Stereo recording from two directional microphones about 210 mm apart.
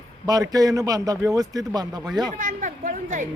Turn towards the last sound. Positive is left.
turn(degrees=-35)  # may be behind; listen again after turning